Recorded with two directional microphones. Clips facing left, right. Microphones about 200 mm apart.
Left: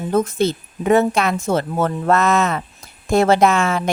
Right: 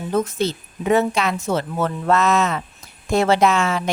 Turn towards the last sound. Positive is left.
turn(degrees=50)  # may be behind; listen again after turning